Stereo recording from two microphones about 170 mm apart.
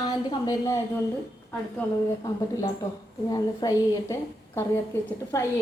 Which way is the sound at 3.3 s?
20° left (ahead or behind).